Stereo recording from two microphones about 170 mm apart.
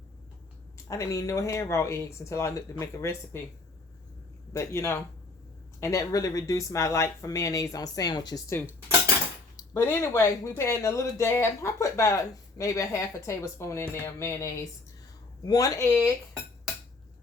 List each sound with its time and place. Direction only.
0.9 s speech: 20° left (ahead or behind)
4.5 s speech: 15° left (ahead or behind)
9.6 s speech: 15° left (ahead or behind)